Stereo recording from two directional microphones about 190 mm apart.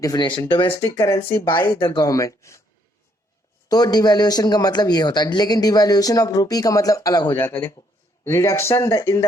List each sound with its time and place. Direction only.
0.0 s speech: 20° left (ahead or behind)
0.8 s speech: 15° left (ahead or behind)
3.7 s speech: 20° left (ahead or behind)